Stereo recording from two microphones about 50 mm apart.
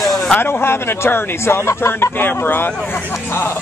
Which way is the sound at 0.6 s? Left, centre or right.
Left.